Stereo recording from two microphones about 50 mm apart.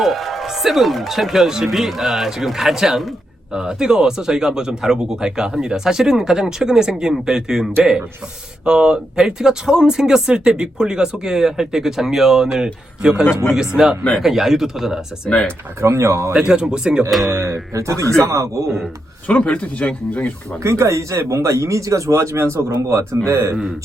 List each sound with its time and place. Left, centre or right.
0.0 s speech: centre
15.3 s speech: left
15.8 s speech: right
16.3 s speech: centre
17.2 s speech: right
19.3 s speech: left
20.6 s speech: right